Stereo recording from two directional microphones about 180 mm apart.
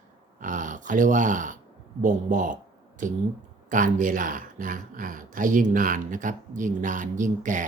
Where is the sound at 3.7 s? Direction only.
45° right (ahead or behind).